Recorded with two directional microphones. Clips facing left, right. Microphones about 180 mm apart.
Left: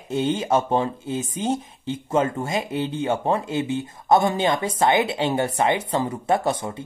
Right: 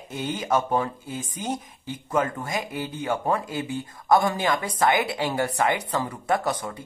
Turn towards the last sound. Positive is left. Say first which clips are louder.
# left 3 dB
turn(degrees=25)  # may be behind; listen again after turning